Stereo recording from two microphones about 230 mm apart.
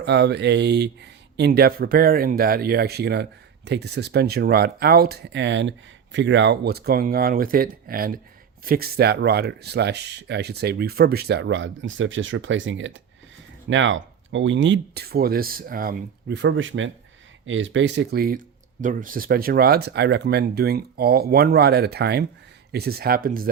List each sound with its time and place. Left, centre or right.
0.0 s speech: right